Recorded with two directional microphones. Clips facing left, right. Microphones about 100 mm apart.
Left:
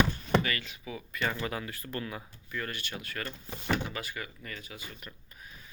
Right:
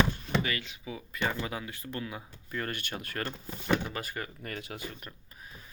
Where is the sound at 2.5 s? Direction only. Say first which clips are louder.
Right 2 dB; 45° right (ahead or behind); by 4.8 s 65° right (ahead or behind).